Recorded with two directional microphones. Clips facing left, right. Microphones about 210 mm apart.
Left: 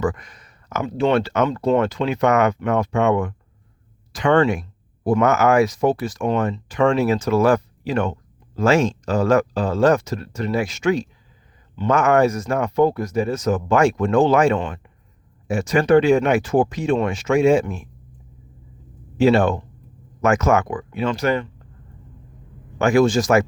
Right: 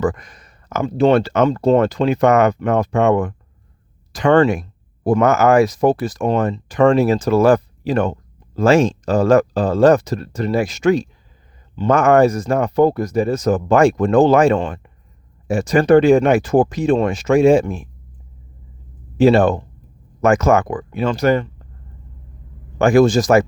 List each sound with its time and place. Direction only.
0.0 s speech: 40° right (ahead or behind)
19.2 s speech: 40° right (ahead or behind)
22.8 s speech: 35° right (ahead or behind)